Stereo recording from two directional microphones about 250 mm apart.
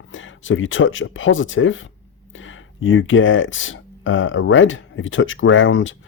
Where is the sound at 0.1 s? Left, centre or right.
Left.